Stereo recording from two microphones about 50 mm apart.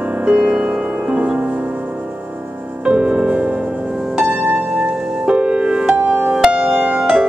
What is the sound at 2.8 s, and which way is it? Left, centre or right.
Music, right.